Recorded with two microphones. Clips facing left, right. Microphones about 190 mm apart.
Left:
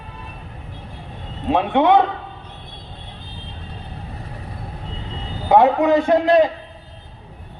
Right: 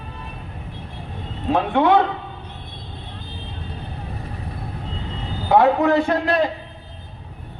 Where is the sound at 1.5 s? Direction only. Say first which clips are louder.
Left 1 dB; 20° left (ahead or behind).